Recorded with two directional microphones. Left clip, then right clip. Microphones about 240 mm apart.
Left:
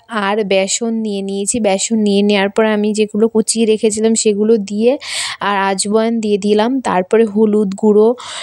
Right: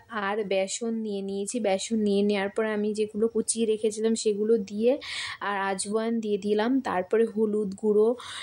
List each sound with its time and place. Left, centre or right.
0.2 s speech: left